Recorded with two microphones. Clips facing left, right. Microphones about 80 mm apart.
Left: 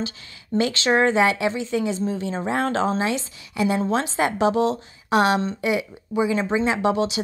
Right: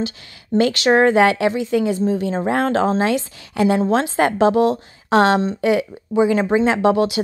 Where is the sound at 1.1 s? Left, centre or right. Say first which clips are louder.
Right 5 dB; right.